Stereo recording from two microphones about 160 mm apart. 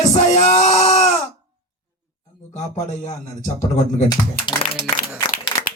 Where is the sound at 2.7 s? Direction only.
50° left (ahead or behind).